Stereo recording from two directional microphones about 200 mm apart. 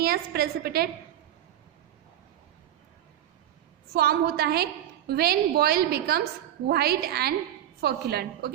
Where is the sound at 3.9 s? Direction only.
50° right (ahead or behind).